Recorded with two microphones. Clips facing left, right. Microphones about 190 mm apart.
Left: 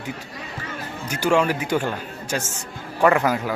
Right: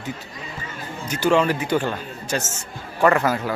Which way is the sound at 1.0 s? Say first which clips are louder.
Right 1 dB; 10° left (ahead or behind).